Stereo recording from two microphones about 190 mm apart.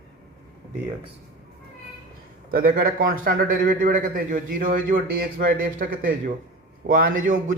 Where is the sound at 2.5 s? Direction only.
50° right (ahead or behind).